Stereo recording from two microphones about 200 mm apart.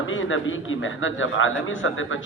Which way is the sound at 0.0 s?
75° left (ahead or behind).